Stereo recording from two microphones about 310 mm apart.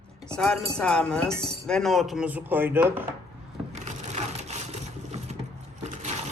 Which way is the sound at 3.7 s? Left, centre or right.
Right.